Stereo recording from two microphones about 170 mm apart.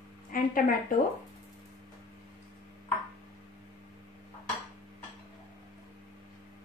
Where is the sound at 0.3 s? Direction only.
55° left (ahead or behind).